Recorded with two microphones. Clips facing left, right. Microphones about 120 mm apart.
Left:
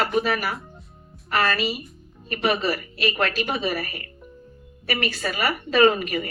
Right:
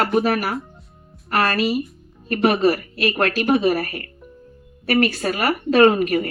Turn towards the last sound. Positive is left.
turn(degrees=-55)  # may be behind; listen again after turning